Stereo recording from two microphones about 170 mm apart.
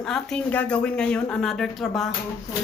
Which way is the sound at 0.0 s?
5° left (ahead or behind).